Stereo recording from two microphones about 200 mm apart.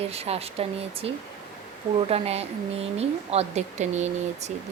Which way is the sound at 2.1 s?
30° right (ahead or behind).